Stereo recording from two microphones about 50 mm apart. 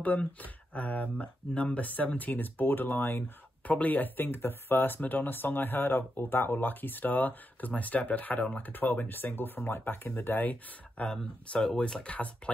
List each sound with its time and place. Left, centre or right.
0.4 s speech: left
3.8 s speech: left
11.6 s speech: centre